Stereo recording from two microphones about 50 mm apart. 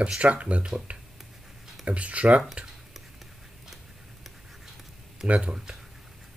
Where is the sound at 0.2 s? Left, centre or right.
Right.